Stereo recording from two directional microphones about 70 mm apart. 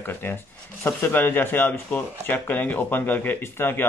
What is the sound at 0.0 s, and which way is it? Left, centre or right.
Speech, left.